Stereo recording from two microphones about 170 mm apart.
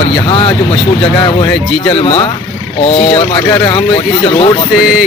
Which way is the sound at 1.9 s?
35° left (ahead or behind).